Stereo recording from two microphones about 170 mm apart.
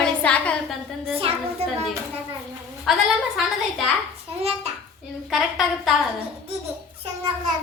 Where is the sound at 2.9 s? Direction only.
Centre (ahead or behind).